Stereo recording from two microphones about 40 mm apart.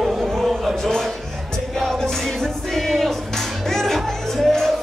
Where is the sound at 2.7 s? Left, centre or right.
Centre.